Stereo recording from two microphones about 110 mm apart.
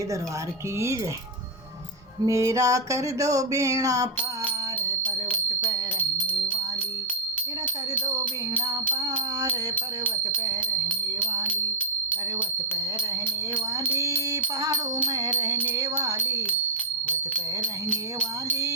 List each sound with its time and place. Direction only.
2.2 s music: 30° right (ahead or behind)
9.5 s a sound: 15° left (ahead or behind)
13.9 s music: 25° right (ahead or behind)
15.2 s music: 35° right (ahead or behind)
17.1 s music: 10° left (ahead or behind)